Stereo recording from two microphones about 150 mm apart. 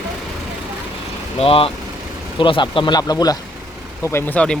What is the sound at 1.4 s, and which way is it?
Speech, 40° left (ahead or behind).